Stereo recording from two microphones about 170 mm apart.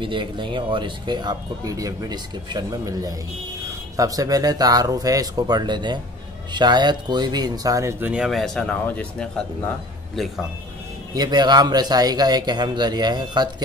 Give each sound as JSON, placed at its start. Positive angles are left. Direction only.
{"t": 0.0, "sound": "speech", "side_deg": -30}
{"t": 8.1, "sound": "speech", "side_deg": -5}
{"t": 11.1, "sound": "speech", "side_deg": -25}